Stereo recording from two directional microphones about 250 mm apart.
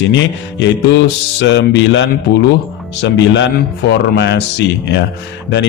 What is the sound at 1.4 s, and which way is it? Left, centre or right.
A man's voice, left.